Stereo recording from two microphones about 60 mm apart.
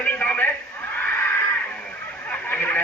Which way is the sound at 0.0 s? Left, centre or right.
Left.